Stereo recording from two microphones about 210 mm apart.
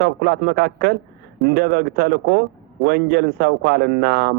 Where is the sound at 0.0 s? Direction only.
50° right (ahead or behind).